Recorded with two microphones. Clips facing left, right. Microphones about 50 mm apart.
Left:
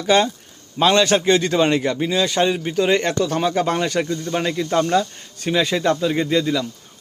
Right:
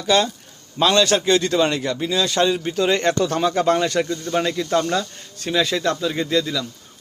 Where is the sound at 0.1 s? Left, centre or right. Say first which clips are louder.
Left 2 dB; left.